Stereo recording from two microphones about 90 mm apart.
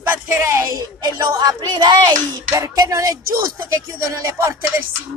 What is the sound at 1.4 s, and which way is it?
Speech, 50° right (ahead or behind).